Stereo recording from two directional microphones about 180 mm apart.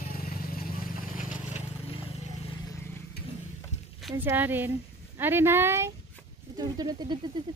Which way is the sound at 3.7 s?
40° left (ahead or behind).